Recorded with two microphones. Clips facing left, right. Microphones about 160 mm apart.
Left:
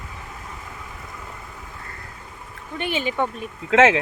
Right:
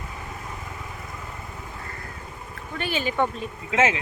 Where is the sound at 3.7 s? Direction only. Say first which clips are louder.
Left 7 dB; 90° left.